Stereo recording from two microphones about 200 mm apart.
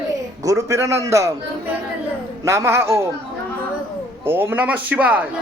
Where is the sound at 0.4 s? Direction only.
15° right (ahead or behind).